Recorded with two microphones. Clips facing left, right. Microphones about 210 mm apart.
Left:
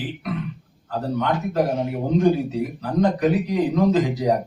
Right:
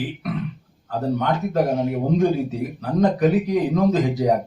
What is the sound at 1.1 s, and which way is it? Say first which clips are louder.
Speech: right 1 dB; 45° right (ahead or behind).